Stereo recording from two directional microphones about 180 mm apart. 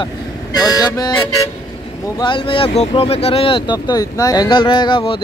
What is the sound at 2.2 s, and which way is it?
Speech, 25° left (ahead or behind).